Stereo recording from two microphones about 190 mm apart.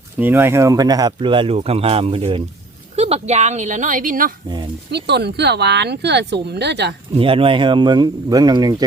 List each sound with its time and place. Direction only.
0.2 s speech: 10° right (ahead or behind); by 4.4 s 45° right (ahead or behind)
4.4 s speech: 25° right (ahead or behind)
4.9 s speech: 60° right (ahead or behind)
7.1 s speech: 30° right (ahead or behind)